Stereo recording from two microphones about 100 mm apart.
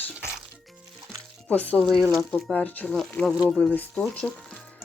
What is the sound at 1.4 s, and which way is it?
Speech, 15° left (ahead or behind).